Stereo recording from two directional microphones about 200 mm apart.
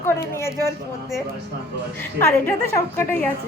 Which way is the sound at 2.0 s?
10° left (ahead or behind).